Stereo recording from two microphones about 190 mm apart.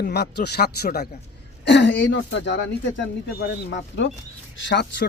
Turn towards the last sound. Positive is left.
turn(degrees=65)  # may be behind; listen again after turning